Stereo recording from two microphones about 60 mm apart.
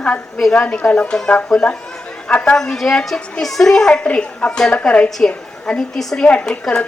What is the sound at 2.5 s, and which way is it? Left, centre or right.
Speech, centre.